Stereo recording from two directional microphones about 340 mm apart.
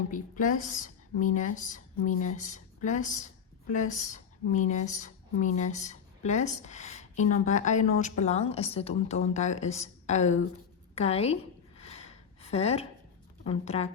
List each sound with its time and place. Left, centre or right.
0.1 s a woman's voice: left
11.8 s a sound: centre
13.4 s a woman's voice: centre